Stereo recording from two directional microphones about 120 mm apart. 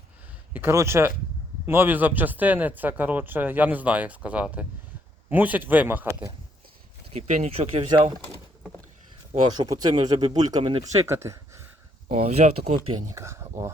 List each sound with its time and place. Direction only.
0.5 s speech: 20° right (ahead or behind)
7.1 s speech: 65° right (ahead or behind)
9.6 s speech: 35° right (ahead or behind)
10.6 s speech: 45° right (ahead or behind)
11.0 s speech: 25° right (ahead or behind)
12.0 s speech: 60° right (ahead or behind)
13.1 s speech: 25° right (ahead or behind)